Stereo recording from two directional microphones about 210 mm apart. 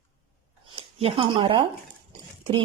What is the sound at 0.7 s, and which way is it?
Speech, 25° right (ahead or behind).